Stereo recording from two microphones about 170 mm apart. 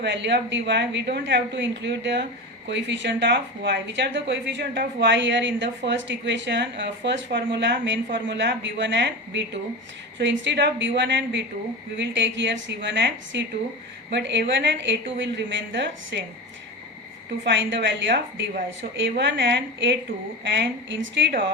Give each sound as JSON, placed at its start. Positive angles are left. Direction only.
{"t": 0.0, "sound": "a woman's voice", "side_deg": -90}
{"t": 17.4, "sound": "a woman's voice", "side_deg": -90}